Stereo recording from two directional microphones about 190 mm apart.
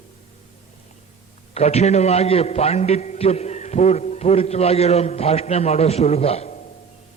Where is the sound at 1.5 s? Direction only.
35° left (ahead or behind).